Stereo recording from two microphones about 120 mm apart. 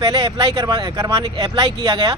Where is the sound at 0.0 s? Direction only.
35° right (ahead or behind).